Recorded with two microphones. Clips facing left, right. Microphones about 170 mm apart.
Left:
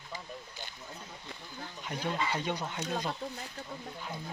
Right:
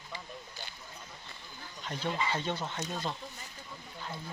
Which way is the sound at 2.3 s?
15° left (ahead or behind).